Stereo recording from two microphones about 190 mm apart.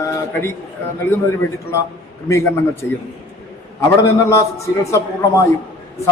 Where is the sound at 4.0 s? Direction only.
15° left (ahead or behind).